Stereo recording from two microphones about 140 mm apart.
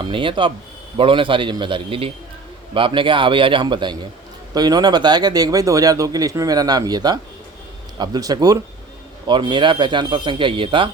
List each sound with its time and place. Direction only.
0.0 s a man's voice: 40° right (ahead or behind)